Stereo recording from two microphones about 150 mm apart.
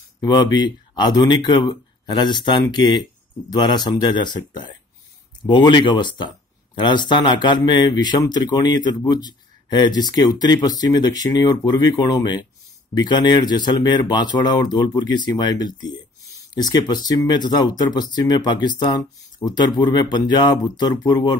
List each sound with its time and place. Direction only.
0.2 s speech: 30° left (ahead or behind)